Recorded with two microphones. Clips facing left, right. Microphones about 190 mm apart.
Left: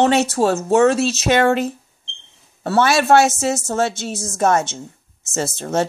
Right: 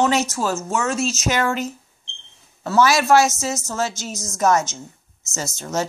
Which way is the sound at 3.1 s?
60° left (ahead or behind).